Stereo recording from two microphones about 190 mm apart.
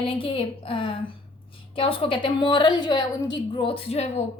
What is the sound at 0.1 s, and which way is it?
A woman's voice, 30° left (ahead or behind).